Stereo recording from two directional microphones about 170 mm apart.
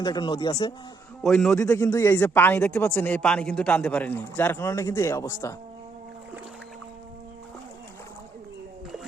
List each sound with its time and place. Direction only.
0.0 s speech: 25° left (ahead or behind)
1.2 s a man's voice: centre (ahead or behind)
1.7 s speech: 20° left (ahead or behind)